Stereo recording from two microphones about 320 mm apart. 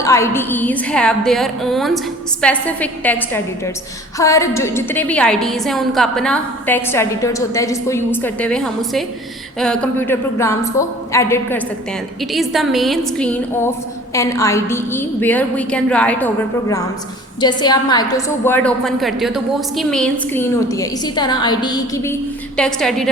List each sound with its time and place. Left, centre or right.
0.0 s a woman's voice: centre